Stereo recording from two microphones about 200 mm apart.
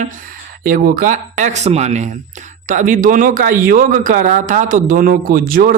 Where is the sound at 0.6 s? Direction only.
45° right (ahead or behind).